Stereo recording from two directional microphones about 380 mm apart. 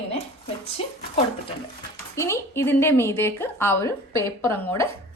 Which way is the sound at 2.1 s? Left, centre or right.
Centre.